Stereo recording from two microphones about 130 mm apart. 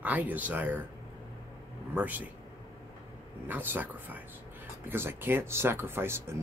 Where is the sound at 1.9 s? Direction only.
10° right (ahead or behind).